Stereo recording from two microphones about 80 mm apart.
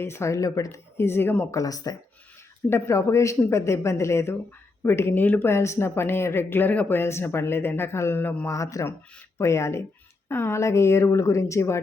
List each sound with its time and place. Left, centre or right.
0.0 s speech: left
1.5 s speech: left
2.6 s speech: left
5.5 s speech: left
8.4 s speech: left